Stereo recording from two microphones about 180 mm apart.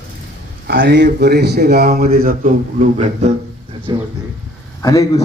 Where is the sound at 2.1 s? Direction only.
50° right (ahead or behind).